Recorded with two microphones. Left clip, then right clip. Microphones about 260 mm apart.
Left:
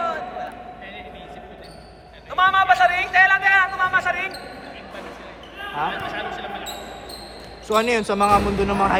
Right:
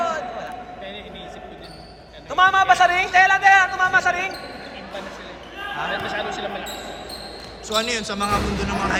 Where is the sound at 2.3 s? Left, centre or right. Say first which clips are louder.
Right 1 dB; centre.